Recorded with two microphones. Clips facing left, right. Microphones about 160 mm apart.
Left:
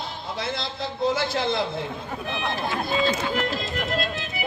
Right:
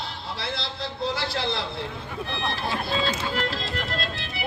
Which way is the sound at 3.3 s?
50° left (ahead or behind).